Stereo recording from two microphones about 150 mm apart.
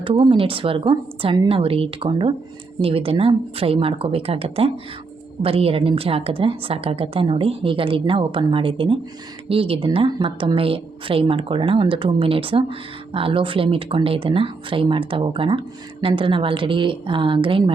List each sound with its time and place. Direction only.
0.0 s speech: 35° right (ahead or behind)